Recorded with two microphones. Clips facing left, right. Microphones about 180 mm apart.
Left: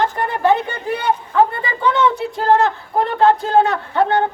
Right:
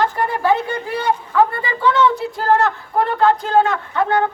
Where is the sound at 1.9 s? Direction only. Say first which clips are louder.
Right 1 dB; 25° left (ahead or behind).